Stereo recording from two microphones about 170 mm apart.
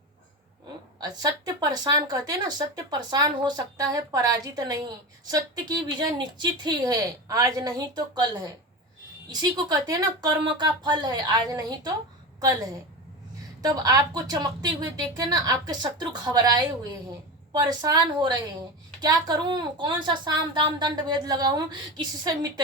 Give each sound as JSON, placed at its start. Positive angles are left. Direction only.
{"t": 0.9, "sound": "a woman's voice", "side_deg": -25}